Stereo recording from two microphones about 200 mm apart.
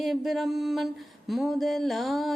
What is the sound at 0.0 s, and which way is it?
Music, centre (ahead or behind).